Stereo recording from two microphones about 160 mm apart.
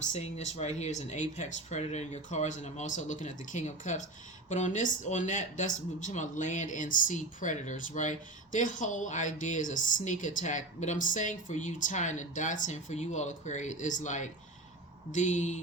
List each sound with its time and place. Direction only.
0.1 s speech: 45° left (ahead or behind)